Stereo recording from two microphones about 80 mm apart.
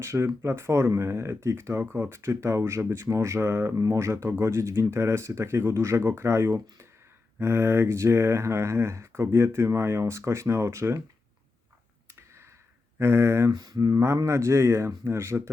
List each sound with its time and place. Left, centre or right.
0.0 s speech: right
13.0 s speech: right
13.5 s mantra: right
14.3 s speech: right